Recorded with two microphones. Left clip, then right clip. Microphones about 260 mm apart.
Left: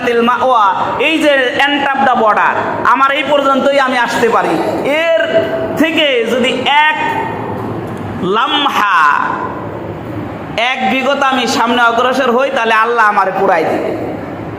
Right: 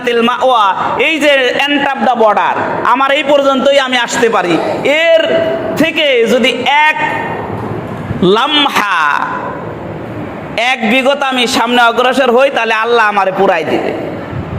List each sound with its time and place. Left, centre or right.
0.0 s a man's voice: right
5.7 s a sound: right
8.3 s a man's voice: right
10.6 s a man's voice: right